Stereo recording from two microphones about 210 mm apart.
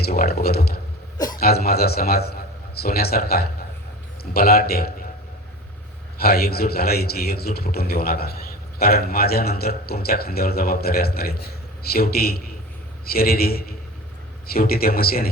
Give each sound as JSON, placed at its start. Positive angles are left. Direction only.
{"t": 0.0, "sound": "a man's voice", "side_deg": 50}
{"t": 6.1, "sound": "a man's voice", "side_deg": 45}